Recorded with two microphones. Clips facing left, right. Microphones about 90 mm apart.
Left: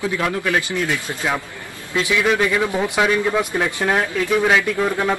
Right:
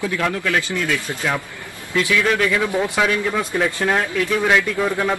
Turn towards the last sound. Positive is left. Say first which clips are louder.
# left 1 dB
turn(degrees=10)  # may be behind; listen again after turning